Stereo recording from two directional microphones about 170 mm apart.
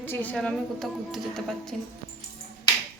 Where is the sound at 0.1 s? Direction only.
10° left (ahead or behind).